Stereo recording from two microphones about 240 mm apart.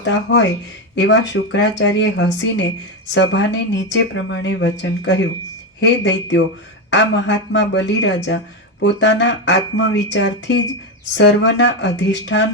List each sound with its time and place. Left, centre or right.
0.0 s speech: left